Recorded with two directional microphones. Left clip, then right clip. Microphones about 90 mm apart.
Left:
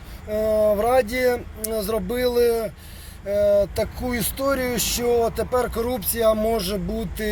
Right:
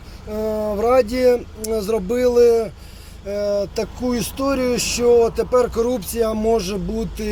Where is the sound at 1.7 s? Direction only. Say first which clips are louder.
Right 4 dB; 30° right (ahead or behind).